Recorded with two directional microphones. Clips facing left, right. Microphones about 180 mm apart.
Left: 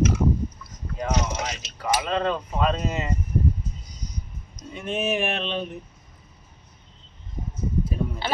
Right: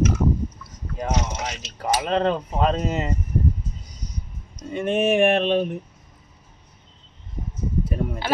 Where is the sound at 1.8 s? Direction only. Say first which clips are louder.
Right 3 dB; 40° right (ahead or behind).